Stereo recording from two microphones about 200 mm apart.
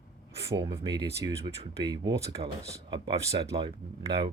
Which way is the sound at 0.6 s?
20° right (ahead or behind).